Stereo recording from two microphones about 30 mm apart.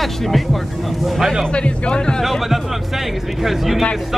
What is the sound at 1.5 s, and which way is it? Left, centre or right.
Speech, left.